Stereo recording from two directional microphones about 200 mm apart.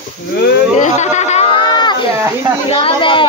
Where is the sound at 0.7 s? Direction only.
35° left (ahead or behind).